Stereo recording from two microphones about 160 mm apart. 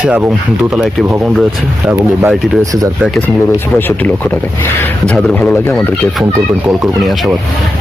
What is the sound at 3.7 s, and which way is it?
Speech, 10° left (ahead or behind).